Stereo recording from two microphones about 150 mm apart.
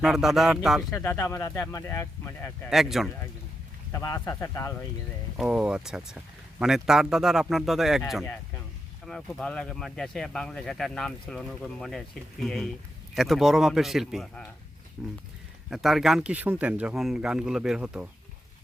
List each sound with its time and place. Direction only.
0.0 s speech: centre (ahead or behind)
1.0 s speech: 20° left (ahead or behind)
2.6 s speech: centre (ahead or behind)
3.9 s speech: 20° left (ahead or behind)
5.4 s speech: 5° right (ahead or behind)
8.2 s speech: 15° left (ahead or behind)
9.0 s speech: 5° left (ahead or behind)